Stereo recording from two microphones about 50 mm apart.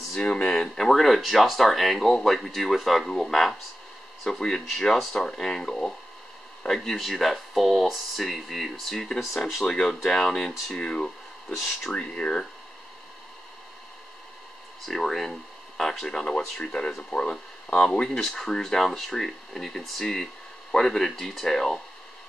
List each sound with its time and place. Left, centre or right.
0.2 s speech: left
0.7 s speech: centre
9.7 s speech: centre
14.9 s speech: centre; by 17.7 s left
18.0 s speech: centre